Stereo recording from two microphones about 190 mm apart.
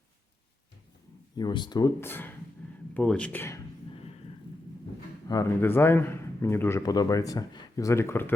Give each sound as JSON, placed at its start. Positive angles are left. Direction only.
{"t": 1.4, "sound": "a man's voice", "side_deg": 25}
{"t": 5.3, "sound": "a man's voice", "side_deg": 15}